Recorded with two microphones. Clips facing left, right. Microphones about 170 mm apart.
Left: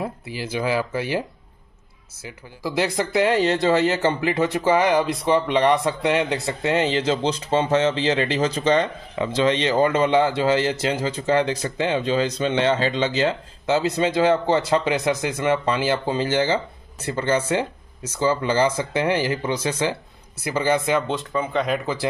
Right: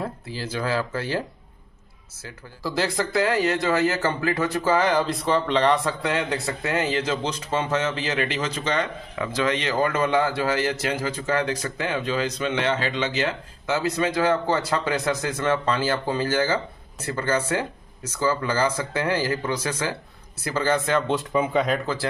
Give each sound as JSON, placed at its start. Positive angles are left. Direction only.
{"t": 0.0, "sound": "speech", "side_deg": 15}
{"t": 2.2, "sound": "speech", "side_deg": 15}
{"t": 21.1, "sound": "speech", "side_deg": -10}